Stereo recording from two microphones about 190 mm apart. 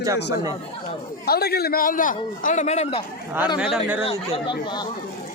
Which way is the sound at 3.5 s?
5° right (ahead or behind).